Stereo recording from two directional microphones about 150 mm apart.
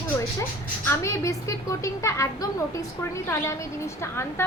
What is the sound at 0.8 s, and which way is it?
A woman's voice, 20° left (ahead or behind).